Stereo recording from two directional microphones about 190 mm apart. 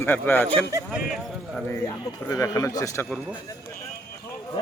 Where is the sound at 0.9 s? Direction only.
Centre (ahead or behind).